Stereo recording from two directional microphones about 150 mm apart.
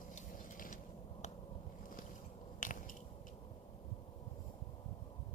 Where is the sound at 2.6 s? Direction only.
60° left (ahead or behind).